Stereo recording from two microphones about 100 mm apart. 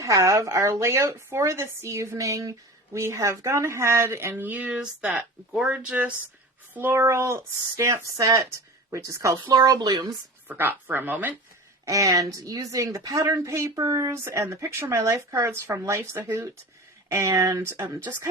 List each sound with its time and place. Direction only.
0.0 s speech: 30° right (ahead or behind)
10.5 s speech: 20° right (ahead or behind)
11.9 s speech: 35° right (ahead or behind)